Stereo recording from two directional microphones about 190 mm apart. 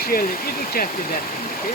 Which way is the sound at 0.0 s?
50° left (ahead or behind).